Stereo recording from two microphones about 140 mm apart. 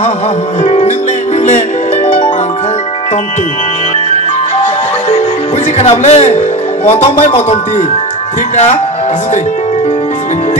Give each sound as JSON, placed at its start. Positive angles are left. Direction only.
{"t": 0.7, "sound": "music", "side_deg": 50}
{"t": 5.8, "sound": "speech", "side_deg": 50}